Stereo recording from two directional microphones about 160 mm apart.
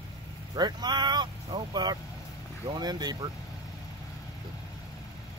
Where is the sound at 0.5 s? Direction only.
25° right (ahead or behind).